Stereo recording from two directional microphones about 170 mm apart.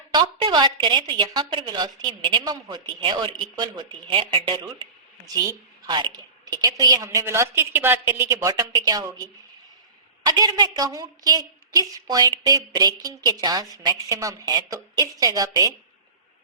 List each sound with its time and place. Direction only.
0.1 s a woman's voice: 25° right (ahead or behind)